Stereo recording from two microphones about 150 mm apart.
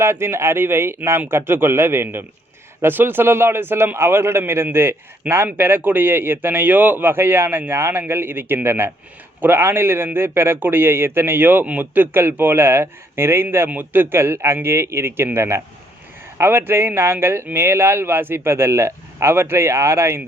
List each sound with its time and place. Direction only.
0.0 s a man's voice: 15° right (ahead or behind)